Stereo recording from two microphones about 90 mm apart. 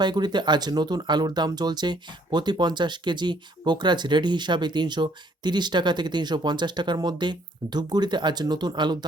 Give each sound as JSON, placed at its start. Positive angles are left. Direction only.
{"t": 0.0, "sound": "speech", "side_deg": -55}